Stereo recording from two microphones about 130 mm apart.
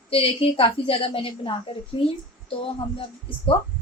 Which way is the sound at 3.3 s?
45° left (ahead or behind).